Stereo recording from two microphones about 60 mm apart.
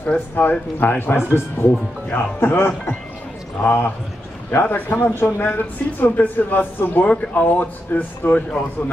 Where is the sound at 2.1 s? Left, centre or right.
Left.